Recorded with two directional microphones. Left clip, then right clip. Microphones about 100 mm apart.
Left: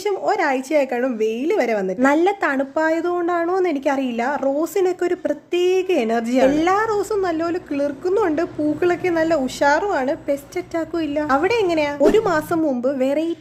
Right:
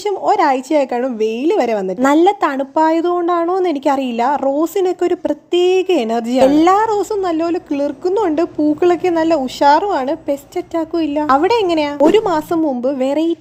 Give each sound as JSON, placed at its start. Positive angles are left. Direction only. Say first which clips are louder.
{"t": 0.3, "sound": "a woman's voice", "louder": "right 7 dB", "side_deg": -35}
{"t": 6.4, "sound": "a woman's voice", "louder": "right 7 dB", "side_deg": -40}
{"t": 6.8, "sound": "a woman's voice", "louder": "right 4 dB", "side_deg": -25}